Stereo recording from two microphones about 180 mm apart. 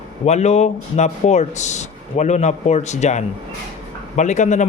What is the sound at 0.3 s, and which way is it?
A man's voice, 40° left (ahead or behind).